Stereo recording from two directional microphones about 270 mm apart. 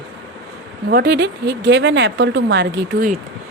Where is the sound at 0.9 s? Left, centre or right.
Right.